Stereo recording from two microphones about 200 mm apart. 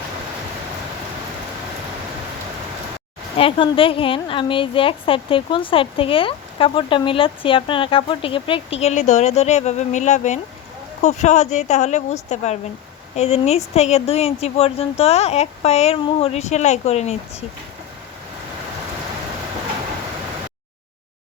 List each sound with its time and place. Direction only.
3.3 s a woman's voice: 25° left (ahead or behind)